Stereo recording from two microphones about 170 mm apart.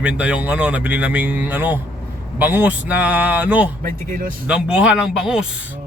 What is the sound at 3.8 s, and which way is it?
Speech, 55° right (ahead or behind).